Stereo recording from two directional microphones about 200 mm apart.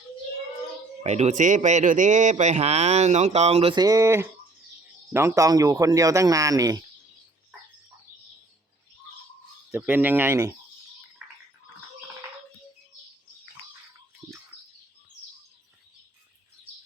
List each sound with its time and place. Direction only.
1.0 s speech: 35° right (ahead or behind); by 6.8 s 15° right (ahead or behind)
9.7 s speech: 10° right (ahead or behind)